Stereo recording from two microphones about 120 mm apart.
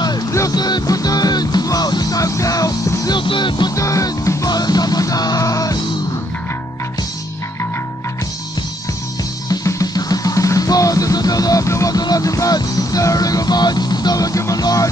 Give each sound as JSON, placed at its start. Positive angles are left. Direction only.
{"t": 0.0, "sound": "music", "side_deg": 30}
{"t": 3.2, "sound": "music", "side_deg": 45}
{"t": 3.7, "sound": "music", "side_deg": 25}
{"t": 9.5, "sound": "music", "side_deg": 30}